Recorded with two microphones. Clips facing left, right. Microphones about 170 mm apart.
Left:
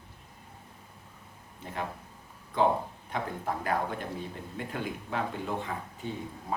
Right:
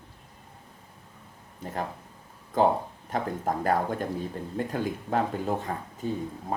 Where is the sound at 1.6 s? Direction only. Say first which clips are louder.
Right 3 dB; 40° right (ahead or behind).